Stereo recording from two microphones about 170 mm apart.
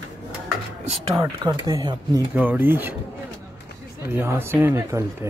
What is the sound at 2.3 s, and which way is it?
Speech, 10° right (ahead or behind).